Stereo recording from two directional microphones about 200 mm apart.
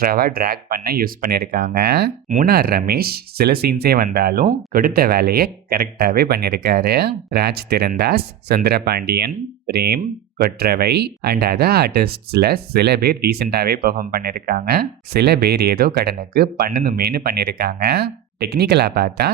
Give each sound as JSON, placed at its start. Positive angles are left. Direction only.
{"t": 0.0, "sound": "speech", "side_deg": -50}